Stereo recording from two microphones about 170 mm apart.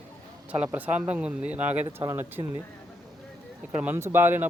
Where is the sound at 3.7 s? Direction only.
10° right (ahead or behind).